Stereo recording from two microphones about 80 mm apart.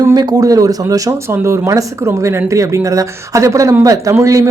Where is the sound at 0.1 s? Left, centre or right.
Right.